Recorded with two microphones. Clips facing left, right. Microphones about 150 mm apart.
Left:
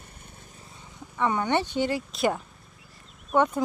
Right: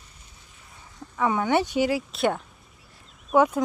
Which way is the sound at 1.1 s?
5° right (ahead or behind).